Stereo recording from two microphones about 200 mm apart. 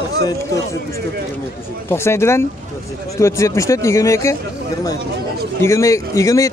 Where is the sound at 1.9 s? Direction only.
15° left (ahead or behind).